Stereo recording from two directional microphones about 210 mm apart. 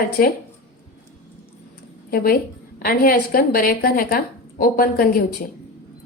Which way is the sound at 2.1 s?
45° left (ahead or behind).